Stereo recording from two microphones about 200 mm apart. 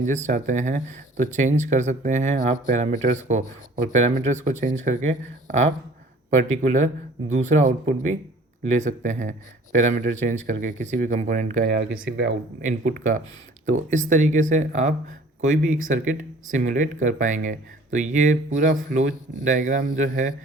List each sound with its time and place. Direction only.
0.3 s speech: 40° right (ahead or behind)
6.3 s speech: 40° right (ahead or behind)
11.9 s speech: 5° right (ahead or behind)
12.1 s speech: 65° right (ahead or behind)
12.6 s speech: 40° right (ahead or behind)